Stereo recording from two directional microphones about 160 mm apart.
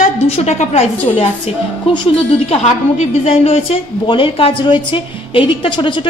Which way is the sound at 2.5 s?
40° left (ahead or behind).